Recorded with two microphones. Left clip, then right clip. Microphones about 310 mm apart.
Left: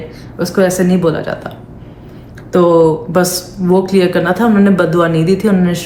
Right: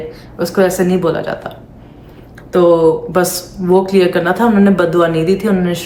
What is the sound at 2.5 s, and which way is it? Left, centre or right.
Speech, centre.